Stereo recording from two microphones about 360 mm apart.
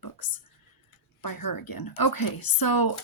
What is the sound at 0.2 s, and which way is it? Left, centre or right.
Speech, left.